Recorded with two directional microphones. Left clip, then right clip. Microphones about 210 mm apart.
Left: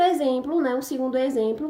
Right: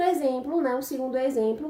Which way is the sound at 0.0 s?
35° left (ahead or behind).